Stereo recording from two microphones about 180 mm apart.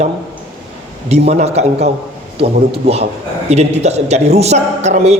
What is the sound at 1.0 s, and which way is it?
A man's voice, 35° right (ahead or behind).